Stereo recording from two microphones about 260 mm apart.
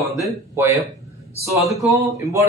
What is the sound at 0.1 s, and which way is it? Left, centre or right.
Speech, centre.